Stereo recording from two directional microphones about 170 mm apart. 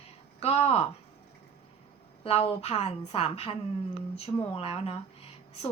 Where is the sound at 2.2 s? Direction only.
35° left (ahead or behind).